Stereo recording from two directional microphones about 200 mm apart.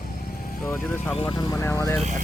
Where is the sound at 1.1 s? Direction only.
25° left (ahead or behind).